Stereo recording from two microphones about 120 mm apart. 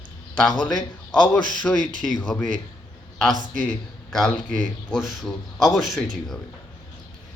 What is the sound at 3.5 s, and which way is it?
A man's voice, 10° left (ahead or behind).